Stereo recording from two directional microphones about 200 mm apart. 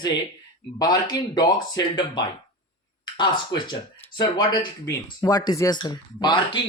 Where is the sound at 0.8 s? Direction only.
20° left (ahead or behind).